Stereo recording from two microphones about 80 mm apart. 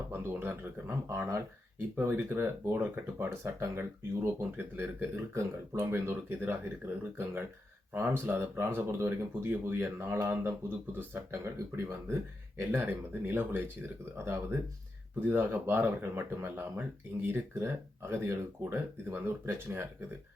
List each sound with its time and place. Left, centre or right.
0.1 s speech: right
1.0 s speech: right
2.0 s speech: right
3.2 s speech: right
8.0 s speech: right